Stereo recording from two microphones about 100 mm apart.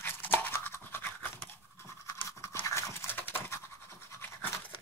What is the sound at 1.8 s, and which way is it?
Toothbrush, 30° left (ahead or behind).